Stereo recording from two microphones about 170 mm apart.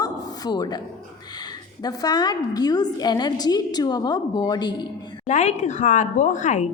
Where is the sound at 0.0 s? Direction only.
25° left (ahead or behind).